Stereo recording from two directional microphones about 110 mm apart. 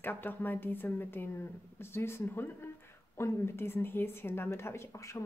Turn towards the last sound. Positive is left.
turn(degrees=25)  # may be behind; listen again after turning